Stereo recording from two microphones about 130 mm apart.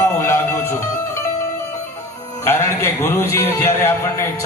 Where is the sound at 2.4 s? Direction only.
15° left (ahead or behind).